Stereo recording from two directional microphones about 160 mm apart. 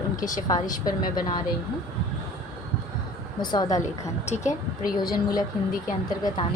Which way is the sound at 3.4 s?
25° left (ahead or behind).